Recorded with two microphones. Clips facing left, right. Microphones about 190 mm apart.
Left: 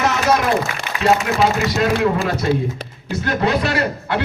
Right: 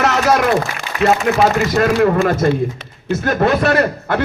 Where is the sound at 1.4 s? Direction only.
55° right (ahead or behind).